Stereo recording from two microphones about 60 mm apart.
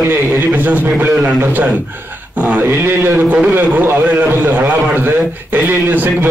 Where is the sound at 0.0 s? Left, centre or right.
Right.